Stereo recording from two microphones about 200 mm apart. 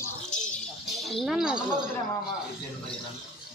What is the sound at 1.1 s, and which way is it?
Speech, centre (ahead or behind).